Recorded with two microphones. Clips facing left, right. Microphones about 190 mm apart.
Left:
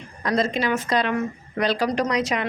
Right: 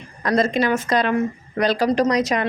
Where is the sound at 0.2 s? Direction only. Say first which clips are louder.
Right 4 dB; 50° right (ahead or behind).